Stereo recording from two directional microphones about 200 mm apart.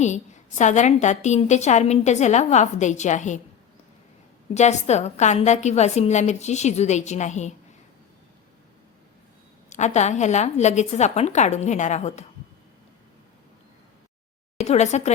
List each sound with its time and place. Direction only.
0.0 s a woman's voice: 35° left (ahead or behind)
4.5 s a woman's voice: 35° left (ahead or behind)
9.6 s a woman's voice: 35° left (ahead or behind)
14.6 s speech: 35° left (ahead or behind)